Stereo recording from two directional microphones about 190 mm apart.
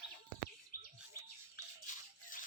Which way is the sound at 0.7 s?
50° left (ahead or behind).